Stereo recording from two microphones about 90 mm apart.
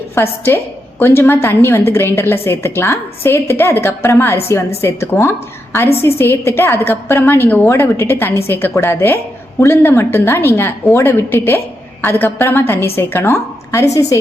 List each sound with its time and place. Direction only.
0.1 s a woman's voice: 25° left (ahead or behind)